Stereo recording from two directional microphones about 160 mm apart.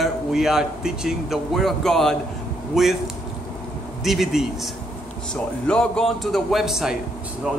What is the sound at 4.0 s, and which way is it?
Speech, centre (ahead or behind).